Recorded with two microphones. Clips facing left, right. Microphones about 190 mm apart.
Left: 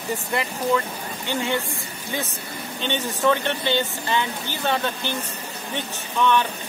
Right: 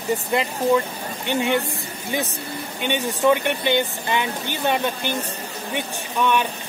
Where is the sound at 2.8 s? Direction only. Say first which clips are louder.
Right 3 dB; 15° right (ahead or behind).